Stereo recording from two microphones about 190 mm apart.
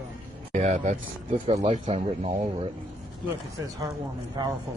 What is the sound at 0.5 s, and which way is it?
Speech, 40° right (ahead or behind).